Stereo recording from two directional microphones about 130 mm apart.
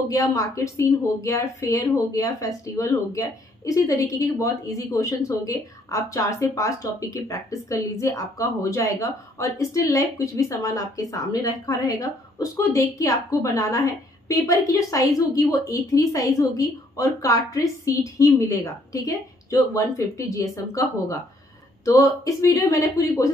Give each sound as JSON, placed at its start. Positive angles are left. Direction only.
{"t": 0.1, "sound": "speech", "side_deg": 25}